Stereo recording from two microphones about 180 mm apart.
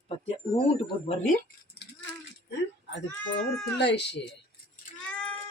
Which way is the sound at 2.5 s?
75° left (ahead or behind).